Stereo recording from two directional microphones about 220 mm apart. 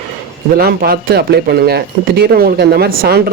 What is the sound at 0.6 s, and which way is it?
Speech, 45° right (ahead or behind).